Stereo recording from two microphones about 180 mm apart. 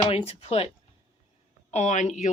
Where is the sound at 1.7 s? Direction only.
40° left (ahead or behind).